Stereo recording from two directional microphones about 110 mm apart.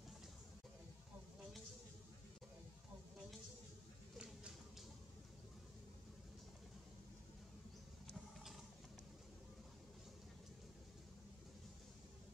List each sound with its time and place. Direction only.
8.1 s mechanisms: centre (ahead or behind)